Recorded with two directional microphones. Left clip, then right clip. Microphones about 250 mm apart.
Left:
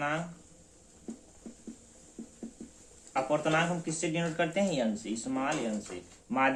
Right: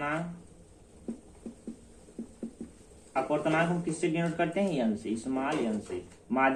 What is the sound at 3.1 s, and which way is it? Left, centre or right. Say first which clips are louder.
Speech: even; left.